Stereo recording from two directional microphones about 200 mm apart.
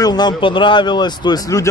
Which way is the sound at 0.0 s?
20° left (ahead or behind).